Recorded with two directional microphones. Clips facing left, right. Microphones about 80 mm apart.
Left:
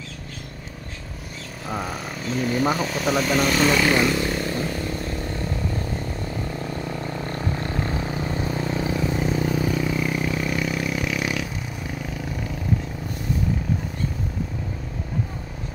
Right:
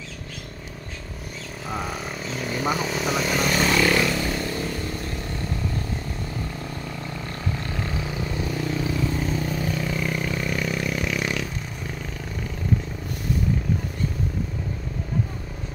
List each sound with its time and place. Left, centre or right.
1.7 s speech: centre
3.8 s a sound: centre
7.0 s vehicle: left